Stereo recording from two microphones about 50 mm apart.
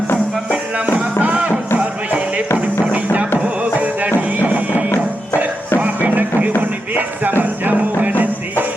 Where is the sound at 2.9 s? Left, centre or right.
Right.